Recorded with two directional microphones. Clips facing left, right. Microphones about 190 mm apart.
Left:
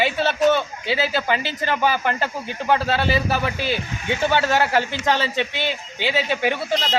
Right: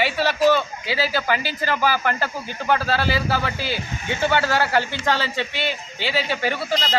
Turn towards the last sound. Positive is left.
turn(degrees=20)  # may be behind; listen again after turning